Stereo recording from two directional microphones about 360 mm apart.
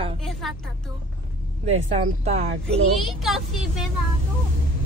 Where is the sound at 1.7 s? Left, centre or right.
Centre.